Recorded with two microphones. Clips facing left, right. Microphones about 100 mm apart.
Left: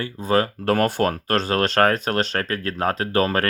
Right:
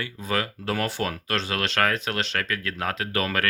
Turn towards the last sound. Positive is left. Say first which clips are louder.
# left 6 dB
turn(degrees=35)  # may be behind; listen again after turning